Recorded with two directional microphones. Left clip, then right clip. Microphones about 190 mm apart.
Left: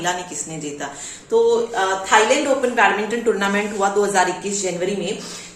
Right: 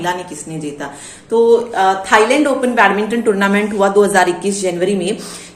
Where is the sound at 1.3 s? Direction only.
45° right (ahead or behind).